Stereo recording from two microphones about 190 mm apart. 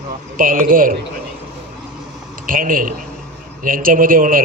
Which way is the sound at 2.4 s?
45° right (ahead or behind).